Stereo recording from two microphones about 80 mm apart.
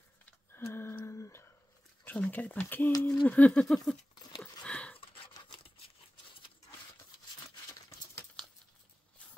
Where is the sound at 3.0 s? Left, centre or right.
Centre.